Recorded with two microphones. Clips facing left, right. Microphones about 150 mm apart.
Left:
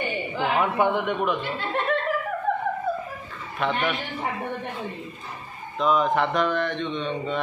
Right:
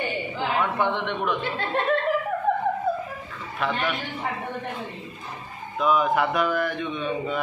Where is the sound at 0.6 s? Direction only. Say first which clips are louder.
Left 2 dB; 10° left (ahead or behind).